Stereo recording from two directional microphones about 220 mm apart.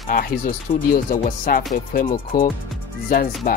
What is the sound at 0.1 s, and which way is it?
Speech, 40° left (ahead or behind).